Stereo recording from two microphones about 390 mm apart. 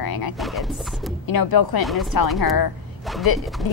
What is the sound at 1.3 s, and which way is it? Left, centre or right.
A woman's voice, left.